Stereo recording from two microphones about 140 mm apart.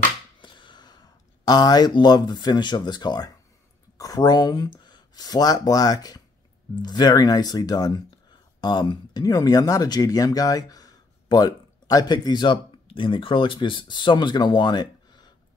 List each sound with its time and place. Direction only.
0.4 s speech: 35° left (ahead or behind)